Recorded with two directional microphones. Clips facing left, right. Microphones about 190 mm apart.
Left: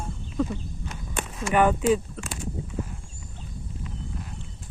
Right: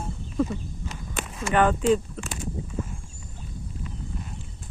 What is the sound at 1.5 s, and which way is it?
Speech, 10° left (ahead or behind).